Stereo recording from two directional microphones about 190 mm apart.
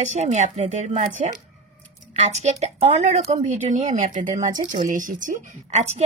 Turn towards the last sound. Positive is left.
turn(degrees=-35)  # may be behind; listen again after turning